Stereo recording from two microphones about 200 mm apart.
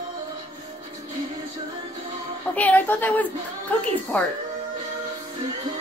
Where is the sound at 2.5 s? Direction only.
10° left (ahead or behind).